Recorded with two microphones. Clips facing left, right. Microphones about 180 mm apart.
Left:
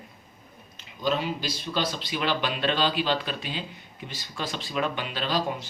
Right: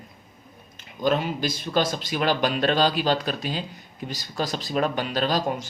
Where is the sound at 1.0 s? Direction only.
50° right (ahead or behind).